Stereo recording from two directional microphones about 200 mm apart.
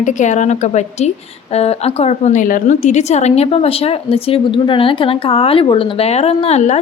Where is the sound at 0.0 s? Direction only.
35° left (ahead or behind).